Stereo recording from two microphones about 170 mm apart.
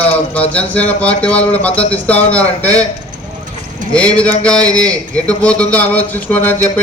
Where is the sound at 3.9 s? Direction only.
5° left (ahead or behind).